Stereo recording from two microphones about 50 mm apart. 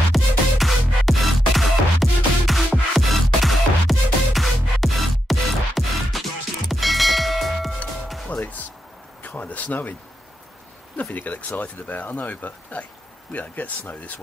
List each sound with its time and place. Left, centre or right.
0.1 s music: centre
8.3 s music: left
9.2 s a sound: left
11.0 s speech: left